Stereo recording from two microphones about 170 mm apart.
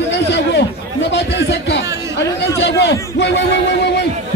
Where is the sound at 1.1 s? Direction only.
90° left.